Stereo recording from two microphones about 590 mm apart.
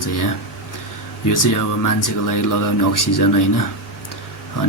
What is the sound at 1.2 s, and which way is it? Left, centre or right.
Speech, left.